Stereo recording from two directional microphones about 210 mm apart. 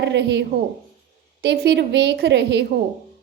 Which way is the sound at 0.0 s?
55° right (ahead or behind).